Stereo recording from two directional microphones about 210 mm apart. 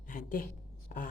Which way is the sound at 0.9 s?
40° left (ahead or behind).